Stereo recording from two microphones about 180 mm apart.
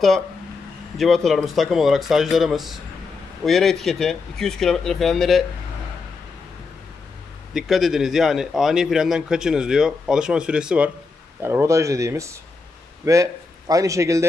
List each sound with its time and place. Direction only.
0.9 s speech: centre (ahead or behind)
7.5 s a man's voice: centre (ahead or behind); by 14.2 s 15° right (ahead or behind)